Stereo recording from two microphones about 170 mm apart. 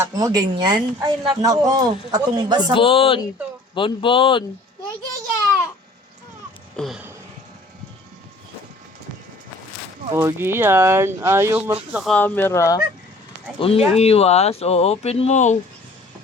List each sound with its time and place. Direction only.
0.0 s speech: 20° right (ahead or behind)
2.7 s speech: 30° left (ahead or behind)
6.7 s a sound: centre (ahead or behind)
10.2 s speech: 15° right (ahead or behind)
12.1 s speech: 10° left (ahead or behind)
13.6 s speech: 35° left (ahead or behind)